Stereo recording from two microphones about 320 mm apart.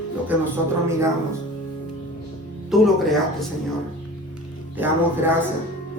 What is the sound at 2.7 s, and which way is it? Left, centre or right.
Speech, centre.